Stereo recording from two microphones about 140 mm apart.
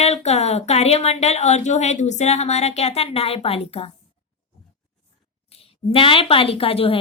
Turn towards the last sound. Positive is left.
turn(degrees=40)  # may be behind; listen again after turning